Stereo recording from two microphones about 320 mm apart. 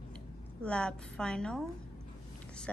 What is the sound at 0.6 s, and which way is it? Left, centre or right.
A woman's voice, centre.